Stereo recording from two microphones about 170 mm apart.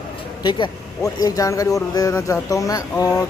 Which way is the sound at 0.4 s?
30° left (ahead or behind).